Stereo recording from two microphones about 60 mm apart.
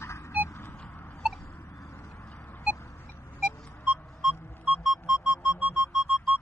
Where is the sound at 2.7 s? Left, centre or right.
Left.